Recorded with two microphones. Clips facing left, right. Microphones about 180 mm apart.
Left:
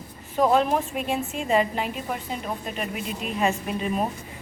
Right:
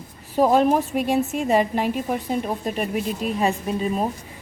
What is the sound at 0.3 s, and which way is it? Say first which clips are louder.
A woman's voice: right 3 dB; 40° right (ahead or behind).